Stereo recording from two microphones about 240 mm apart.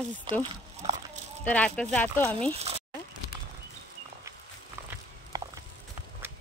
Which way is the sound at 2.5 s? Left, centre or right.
Right.